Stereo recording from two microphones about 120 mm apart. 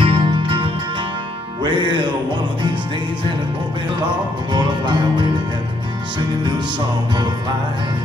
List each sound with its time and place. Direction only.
0.0 s music: 45° right (ahead or behind)
1.6 s music: 40° right (ahead or behind)
4.5 s music: 40° right (ahead or behind)